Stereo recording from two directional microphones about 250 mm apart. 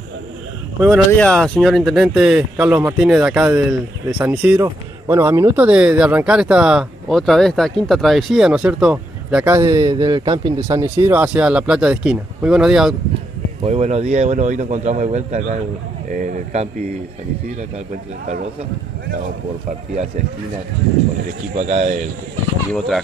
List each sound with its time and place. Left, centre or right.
0.7 s speech: centre
13.7 s a man's voice: right
21.5 s a man's voice: right